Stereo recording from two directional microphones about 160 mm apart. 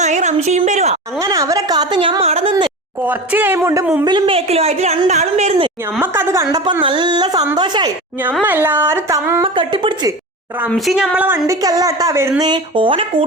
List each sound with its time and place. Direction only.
0.0 s a woman's voice: 45° right (ahead or behind)
1.2 s a woman's voice: 20° right (ahead or behind); by 2.6 s 40° right (ahead or behind)
3.0 s a woman's voice: 10° right (ahead or behind)
4.0 s a woman's voice: 30° right (ahead or behind)
6.0 s a woman's voice: 15° right (ahead or behind)
6.8 s a woman's voice: 30° right (ahead or behind)
8.4 s a woman's voice: 10° right (ahead or behind)
9.4 s a woman's voice: 30° right (ahead or behind)
10.7 s a woman's voice: centre (ahead or behind); by 13.2 s 35° right (ahead or behind)